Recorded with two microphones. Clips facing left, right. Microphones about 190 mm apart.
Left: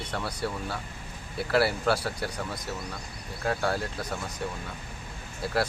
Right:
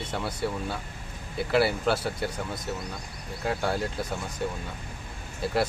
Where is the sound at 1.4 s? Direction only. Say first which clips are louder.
Right 1 dB; centre (ahead or behind).